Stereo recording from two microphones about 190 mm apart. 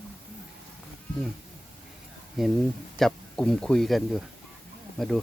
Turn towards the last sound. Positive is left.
turn(degrees=0)  # may be behind; listen again after turning